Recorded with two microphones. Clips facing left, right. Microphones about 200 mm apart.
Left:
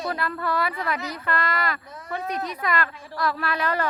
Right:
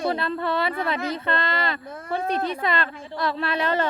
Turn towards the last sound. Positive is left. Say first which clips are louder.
# right 2 dB
turn(degrees=-25)  # may be behind; listen again after turning